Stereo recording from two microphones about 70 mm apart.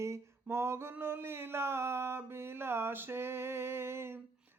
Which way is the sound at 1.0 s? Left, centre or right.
Right.